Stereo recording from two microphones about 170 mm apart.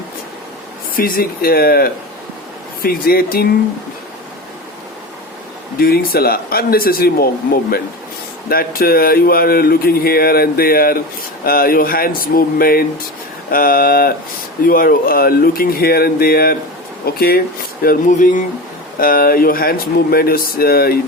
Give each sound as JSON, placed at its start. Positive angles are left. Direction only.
{"t": 0.9, "sound": "speech", "side_deg": 60}
{"t": 5.8, "sound": "speech", "side_deg": 60}
{"t": 17.8, "sound": "speech", "side_deg": 50}
{"t": 18.9, "sound": "speech", "side_deg": 55}